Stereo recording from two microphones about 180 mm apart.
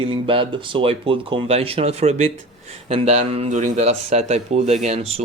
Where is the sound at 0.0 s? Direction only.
30° right (ahead or behind).